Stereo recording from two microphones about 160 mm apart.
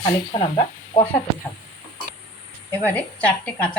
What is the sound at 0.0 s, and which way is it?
Speech, 25° left (ahead or behind).